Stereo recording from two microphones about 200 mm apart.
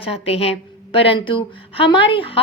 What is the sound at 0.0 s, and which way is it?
Speech, 30° left (ahead or behind).